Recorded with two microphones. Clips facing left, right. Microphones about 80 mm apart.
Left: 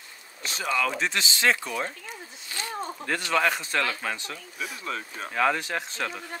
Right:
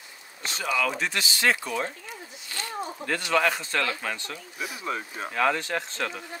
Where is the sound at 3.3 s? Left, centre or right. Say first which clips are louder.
Right 1 dB; centre.